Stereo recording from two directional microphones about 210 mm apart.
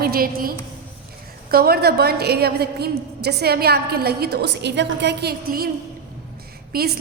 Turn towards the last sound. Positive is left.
turn(degrees=-45)  # may be behind; listen again after turning